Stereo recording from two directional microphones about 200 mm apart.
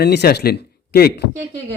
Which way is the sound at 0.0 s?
55° left (ahead or behind).